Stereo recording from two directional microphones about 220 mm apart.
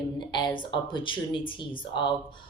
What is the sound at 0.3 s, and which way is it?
Speech, 20° left (ahead or behind).